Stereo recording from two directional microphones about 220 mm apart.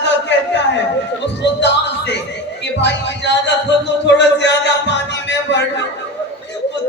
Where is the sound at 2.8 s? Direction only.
50° left (ahead or behind).